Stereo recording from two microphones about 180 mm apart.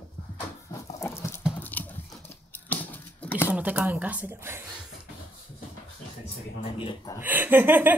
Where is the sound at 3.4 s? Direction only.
5° right (ahead or behind).